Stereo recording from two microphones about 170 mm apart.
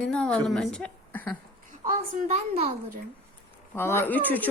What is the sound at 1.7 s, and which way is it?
A child's voice, 50° right (ahead or behind).